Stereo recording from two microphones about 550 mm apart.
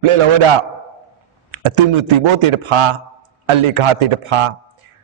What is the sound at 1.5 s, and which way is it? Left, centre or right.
A man's voice, right.